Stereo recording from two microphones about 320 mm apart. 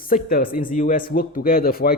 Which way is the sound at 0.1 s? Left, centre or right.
Left.